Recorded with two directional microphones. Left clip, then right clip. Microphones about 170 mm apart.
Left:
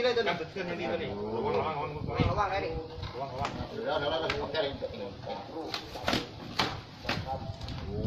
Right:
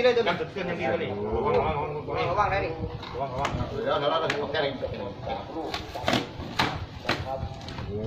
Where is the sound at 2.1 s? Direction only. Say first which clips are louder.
Right 5 dB; centre (ahead or behind).